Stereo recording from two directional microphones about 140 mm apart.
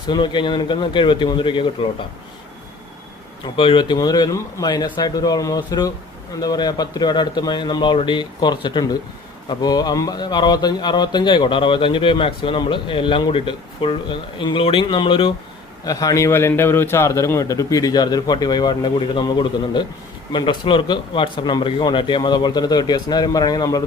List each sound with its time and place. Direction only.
0.1 s speech: 35° left (ahead or behind)
3.4 s a man's voice: 40° left (ahead or behind)
15.9 s a man's voice: 25° left (ahead or behind)